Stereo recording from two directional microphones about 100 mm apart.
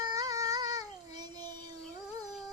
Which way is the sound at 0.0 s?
40° right (ahead or behind).